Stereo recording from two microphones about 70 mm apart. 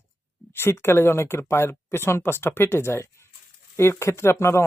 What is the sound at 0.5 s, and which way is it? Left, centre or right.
Speech, left.